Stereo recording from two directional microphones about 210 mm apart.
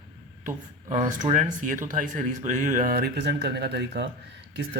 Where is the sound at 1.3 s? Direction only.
40° right (ahead or behind); by 4.1 s 55° right (ahead or behind).